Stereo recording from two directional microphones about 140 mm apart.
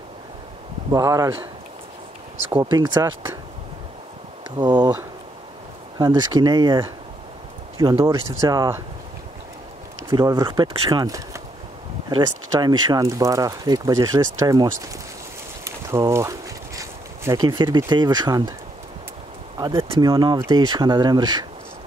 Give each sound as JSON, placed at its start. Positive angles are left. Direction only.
{"t": 0.9, "sound": "speech", "side_deg": -25}
{"t": 2.6, "sound": "speech", "side_deg": -30}
{"t": 4.6, "sound": "speech", "side_deg": -30}
{"t": 5.9, "sound": "speech", "side_deg": -30}
{"t": 8.0, "sound": "speech", "side_deg": -20}
{"t": 10.1, "sound": "speech", "side_deg": -25}
{"t": 15.6, "sound": "a sound", "side_deg": -20}
{"t": 20.0, "sound": "speech", "side_deg": -30}